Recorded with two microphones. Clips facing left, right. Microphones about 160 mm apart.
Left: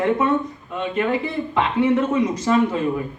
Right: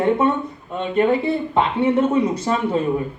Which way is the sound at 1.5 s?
30° right (ahead or behind).